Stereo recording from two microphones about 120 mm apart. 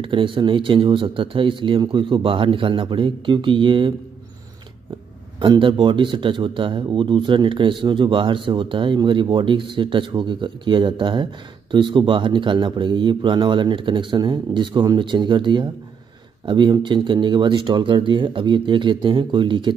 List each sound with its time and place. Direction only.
0.0 s speech: 45° right (ahead or behind)
5.4 s a man's voice: 40° right (ahead or behind)